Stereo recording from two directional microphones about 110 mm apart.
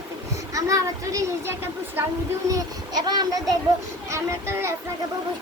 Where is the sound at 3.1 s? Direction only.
35° right (ahead or behind).